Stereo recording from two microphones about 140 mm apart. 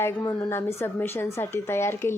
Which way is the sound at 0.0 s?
20° left (ahead or behind).